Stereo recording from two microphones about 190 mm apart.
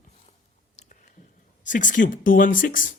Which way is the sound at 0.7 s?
35° left (ahead or behind).